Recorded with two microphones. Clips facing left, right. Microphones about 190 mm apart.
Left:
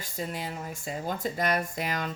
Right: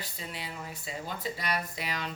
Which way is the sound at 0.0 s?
45° left (ahead or behind).